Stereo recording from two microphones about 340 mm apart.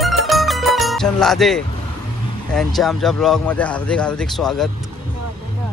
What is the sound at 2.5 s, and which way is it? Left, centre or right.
Speech, centre.